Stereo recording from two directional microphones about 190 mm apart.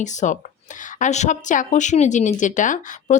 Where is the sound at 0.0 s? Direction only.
40° left (ahead or behind).